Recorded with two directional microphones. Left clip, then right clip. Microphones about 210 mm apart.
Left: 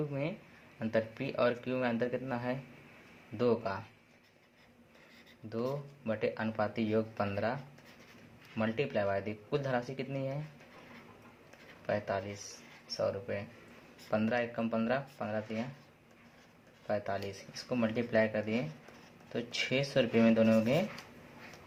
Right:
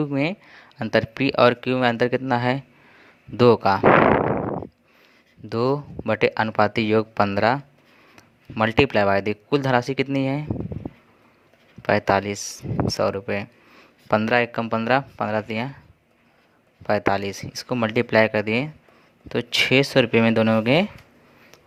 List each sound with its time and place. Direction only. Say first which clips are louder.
0.0 s speech: right 13 dB; 45° right (ahead or behind)
5.5 s speech: right 14 dB; 50° right (ahead or behind)
11.8 s speech: right 15 dB; 50° right (ahead or behind)
16.8 s speech: right 14 dB; 50° right (ahead or behind)